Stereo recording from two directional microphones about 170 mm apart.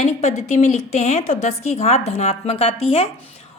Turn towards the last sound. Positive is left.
turn(degrees=35)  # may be behind; listen again after turning